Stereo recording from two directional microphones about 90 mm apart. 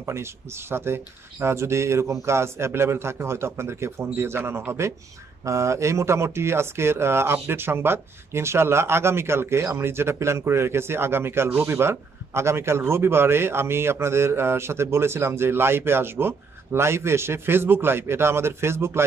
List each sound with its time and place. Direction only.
0.0 s speech: 30° right (ahead or behind)